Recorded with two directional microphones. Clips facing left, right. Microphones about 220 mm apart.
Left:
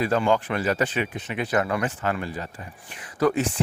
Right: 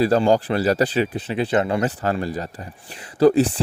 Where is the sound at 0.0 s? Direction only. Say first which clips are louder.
Right 5 dB; 35° right (ahead or behind).